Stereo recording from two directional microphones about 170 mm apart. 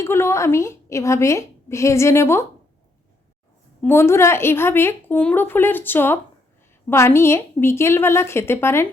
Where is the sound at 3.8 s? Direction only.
15° left (ahead or behind).